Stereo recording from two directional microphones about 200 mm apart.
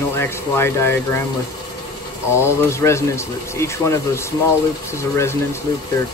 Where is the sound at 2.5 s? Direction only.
15° left (ahead or behind).